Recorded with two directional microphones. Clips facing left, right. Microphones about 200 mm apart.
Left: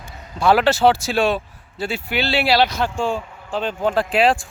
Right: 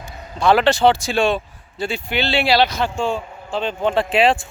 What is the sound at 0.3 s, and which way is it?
Speech, 5° left (ahead or behind).